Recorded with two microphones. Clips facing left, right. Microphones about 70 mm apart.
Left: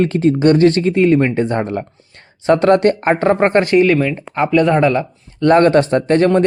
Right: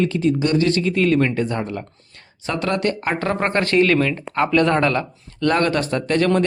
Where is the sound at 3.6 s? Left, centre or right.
Centre.